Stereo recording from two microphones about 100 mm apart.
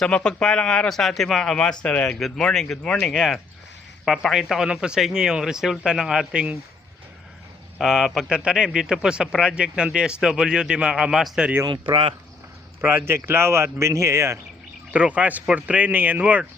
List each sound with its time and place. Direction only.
0.0 s speech: 10° left (ahead or behind); by 6.6 s 10° right (ahead or behind)
7.8 s speech: 5° right (ahead or behind)
11.6 s speech: 55° right (ahead or behind)
12.8 s speech: 25° right (ahead or behind)
14.9 s speech: 10° right (ahead or behind)